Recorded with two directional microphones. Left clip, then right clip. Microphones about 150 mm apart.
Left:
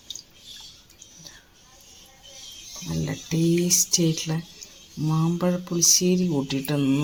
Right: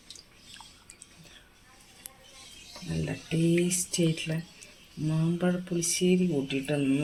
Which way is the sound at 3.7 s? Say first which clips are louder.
Left 8 dB; 55° left (ahead or behind).